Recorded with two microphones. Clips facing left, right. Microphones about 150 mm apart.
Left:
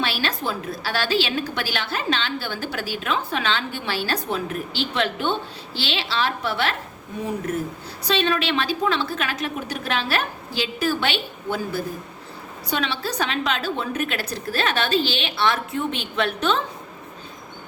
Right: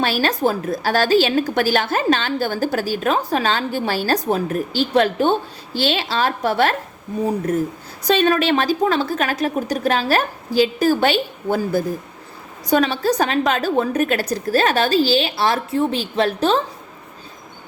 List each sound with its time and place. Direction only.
0.0 s a woman's voice: 45° right (ahead or behind)
8.0 s a woman's voice: 45° right (ahead or behind)